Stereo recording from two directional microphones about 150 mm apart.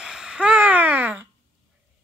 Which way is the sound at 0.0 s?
5° right (ahead or behind).